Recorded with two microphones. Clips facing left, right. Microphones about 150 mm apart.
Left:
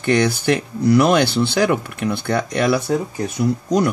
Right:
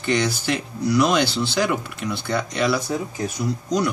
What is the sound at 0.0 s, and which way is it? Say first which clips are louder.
Speech: left 5 dB; 55° left (ahead or behind).